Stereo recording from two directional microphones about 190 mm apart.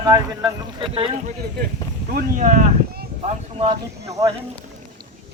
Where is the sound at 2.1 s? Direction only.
45° right (ahead or behind).